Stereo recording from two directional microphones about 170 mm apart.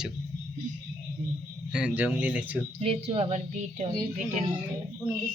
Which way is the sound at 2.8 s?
35° right (ahead or behind).